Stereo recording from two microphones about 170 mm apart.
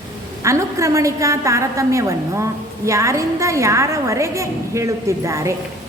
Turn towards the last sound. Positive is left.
turn(degrees=-15)  # may be behind; listen again after turning